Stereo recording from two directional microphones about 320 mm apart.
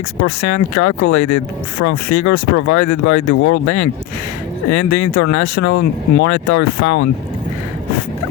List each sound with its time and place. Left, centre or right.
0.2 s speech: left